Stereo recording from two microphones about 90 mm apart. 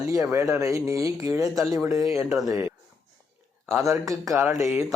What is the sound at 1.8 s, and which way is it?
Speech, 30° right (ahead or behind).